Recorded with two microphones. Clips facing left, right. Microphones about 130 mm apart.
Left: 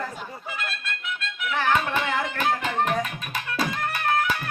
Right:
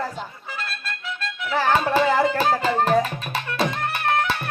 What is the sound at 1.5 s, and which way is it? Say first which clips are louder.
Music: right 4 dB; 35° right (ahead or behind).